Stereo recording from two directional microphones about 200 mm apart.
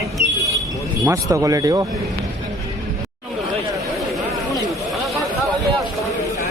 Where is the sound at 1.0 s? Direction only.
15° right (ahead or behind).